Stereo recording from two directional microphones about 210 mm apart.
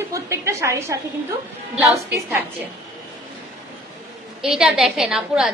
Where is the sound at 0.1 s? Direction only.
15° right (ahead or behind).